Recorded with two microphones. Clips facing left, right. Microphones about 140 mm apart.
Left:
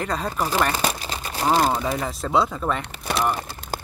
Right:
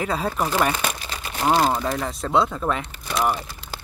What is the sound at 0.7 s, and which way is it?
Crumpling, 35° left (ahead or behind).